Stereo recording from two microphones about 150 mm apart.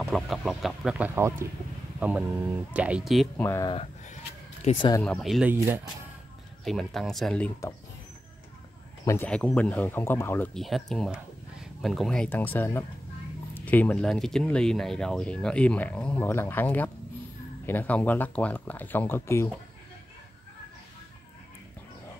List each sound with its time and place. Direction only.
0.0 s speech: centre (ahead or behind)
3.3 s speech: 15° left (ahead or behind)
3.6 s speech: 40° left (ahead or behind)
5.0 s speech: 5° left (ahead or behind)
5.5 s speech: 15° right (ahead or behind)
6.6 s speech: centre (ahead or behind)
9.0 s speech: 20° left (ahead or behind)
9.3 s speech: 10° left (ahead or behind)
10.5 s speech: centre (ahead or behind); by 19.5 s 20° left (ahead or behind)